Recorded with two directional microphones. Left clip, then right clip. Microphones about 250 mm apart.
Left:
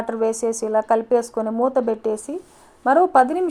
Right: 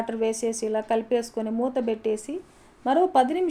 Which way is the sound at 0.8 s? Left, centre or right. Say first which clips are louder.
Left 6 dB; left.